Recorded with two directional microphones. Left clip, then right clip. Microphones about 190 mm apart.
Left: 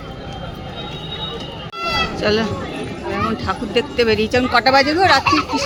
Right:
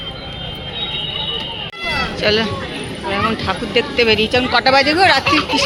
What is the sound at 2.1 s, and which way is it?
Speech, 20° left (ahead or behind).